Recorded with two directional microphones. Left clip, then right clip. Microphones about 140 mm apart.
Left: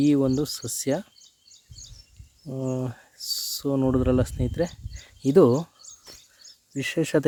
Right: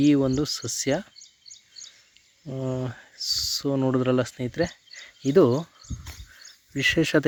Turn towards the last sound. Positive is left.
turn(degrees=5)  # may be behind; listen again after turning